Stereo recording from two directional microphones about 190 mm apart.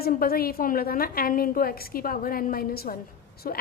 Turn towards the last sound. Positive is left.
turn(degrees=50)  # may be behind; listen again after turning